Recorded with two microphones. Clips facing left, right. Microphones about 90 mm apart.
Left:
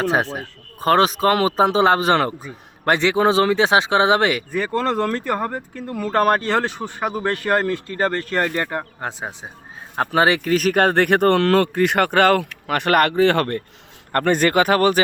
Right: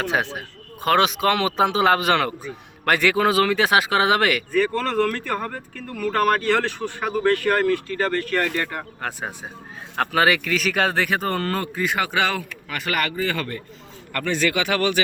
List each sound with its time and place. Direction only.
0.0 s speech: 35° left (ahead or behind); by 13.6 s 60° left (ahead or behind)
14.1 s speech: 45° left (ahead or behind)